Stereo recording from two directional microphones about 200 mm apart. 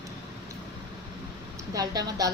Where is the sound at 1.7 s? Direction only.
20° right (ahead or behind).